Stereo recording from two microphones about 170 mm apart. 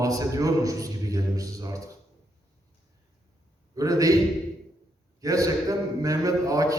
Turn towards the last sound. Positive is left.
turn(degrees=-20)  # may be behind; listen again after turning